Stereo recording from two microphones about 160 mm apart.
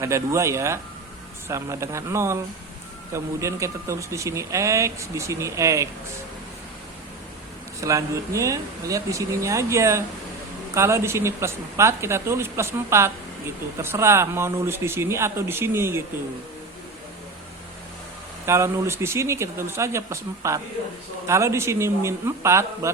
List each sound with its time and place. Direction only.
0.0 s speech: 20° right (ahead or behind)
7.8 s speech: 20° right (ahead or behind)
18.4 s speech: 15° right (ahead or behind)